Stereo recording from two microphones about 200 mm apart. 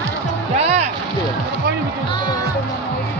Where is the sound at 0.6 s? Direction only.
30° right (ahead or behind).